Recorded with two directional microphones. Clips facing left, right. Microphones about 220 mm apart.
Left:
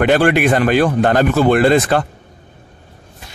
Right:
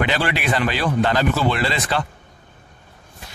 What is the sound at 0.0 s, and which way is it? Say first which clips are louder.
Speech: left 9 dB; 50° left (ahead or behind).